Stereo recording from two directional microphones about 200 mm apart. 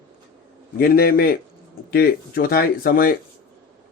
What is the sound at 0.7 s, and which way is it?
Speech, 50° left (ahead or behind).